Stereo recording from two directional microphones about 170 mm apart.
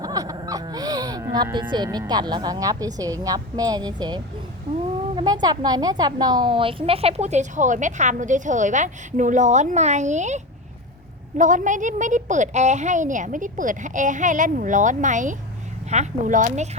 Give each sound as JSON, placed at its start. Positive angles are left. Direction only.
{"t": 0.0, "sound": "laughter", "side_deg": -20}
{"t": 1.5, "sound": "a woman's voice", "side_deg": -25}